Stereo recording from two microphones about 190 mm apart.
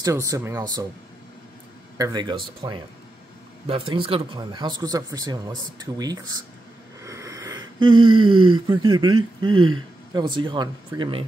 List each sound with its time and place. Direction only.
0.0 s speech: 15° right (ahead or behind)
2.0 s speech: 25° right (ahead or behind)
7.0 s a sound: 15° right (ahead or behind)
8.2 s speech: 25° right (ahead or behind)